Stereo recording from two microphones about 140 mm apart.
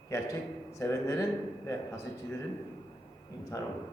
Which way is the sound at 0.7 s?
20° left (ahead or behind).